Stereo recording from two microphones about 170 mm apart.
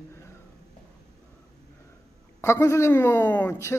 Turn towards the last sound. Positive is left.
turn(degrees=15)  # may be behind; listen again after turning